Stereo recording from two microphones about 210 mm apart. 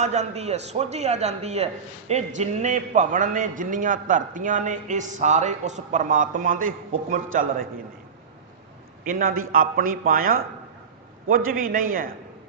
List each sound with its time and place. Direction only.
0.0 s a man's voice: 30° right (ahead or behind)
9.0 s a man's voice: 40° right (ahead or behind)